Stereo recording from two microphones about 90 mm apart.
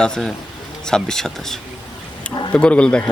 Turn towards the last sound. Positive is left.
turn(degrees=10)  # may be behind; listen again after turning